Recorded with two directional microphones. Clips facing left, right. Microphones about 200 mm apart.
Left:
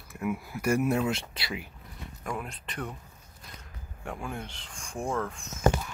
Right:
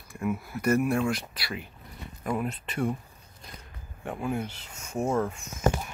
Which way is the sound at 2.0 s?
5° right (ahead or behind).